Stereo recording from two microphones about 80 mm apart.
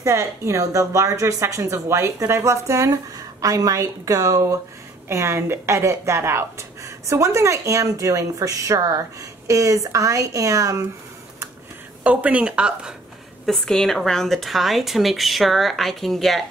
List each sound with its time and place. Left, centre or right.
0.0 s speech: right
12.0 s speech: centre
13.5 s speech: centre